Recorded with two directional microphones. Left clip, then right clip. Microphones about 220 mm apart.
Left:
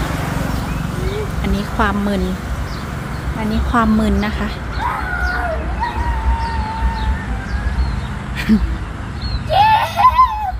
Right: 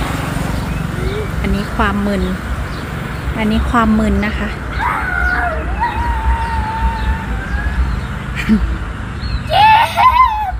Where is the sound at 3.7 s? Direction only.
Centre (ahead or behind).